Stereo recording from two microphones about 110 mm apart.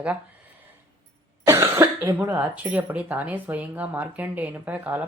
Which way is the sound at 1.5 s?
25° right (ahead or behind).